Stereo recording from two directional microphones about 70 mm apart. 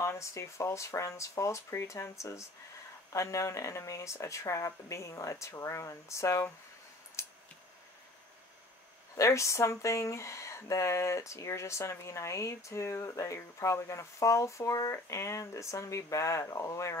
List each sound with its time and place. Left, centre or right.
0.0 s speech: left
7.2 s a sound: left
9.1 s speech: left